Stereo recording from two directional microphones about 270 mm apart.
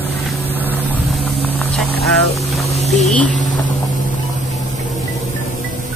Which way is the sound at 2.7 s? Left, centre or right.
Left.